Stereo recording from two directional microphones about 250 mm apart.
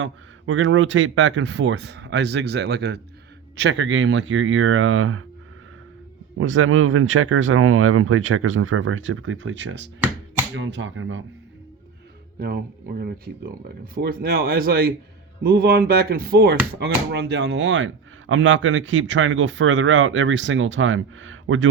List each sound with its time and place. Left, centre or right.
0.0 s speech: right
6.3 s speech: right
13.0 s speech: right